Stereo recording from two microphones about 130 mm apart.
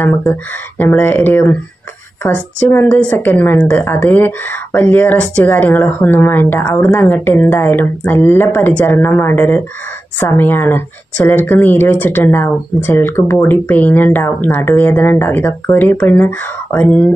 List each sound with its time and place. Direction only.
0.0 s a woman's voice: 15° left (ahead or behind)